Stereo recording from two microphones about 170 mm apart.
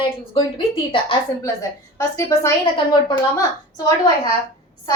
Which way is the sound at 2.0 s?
20° left (ahead or behind).